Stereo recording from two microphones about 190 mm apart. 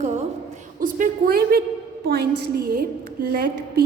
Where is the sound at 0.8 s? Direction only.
45° right (ahead or behind).